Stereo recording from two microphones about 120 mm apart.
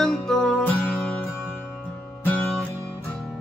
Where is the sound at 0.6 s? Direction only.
15° left (ahead or behind).